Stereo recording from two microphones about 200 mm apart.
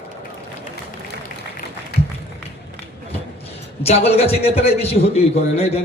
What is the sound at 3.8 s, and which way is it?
A man's voice, 30° left (ahead or behind).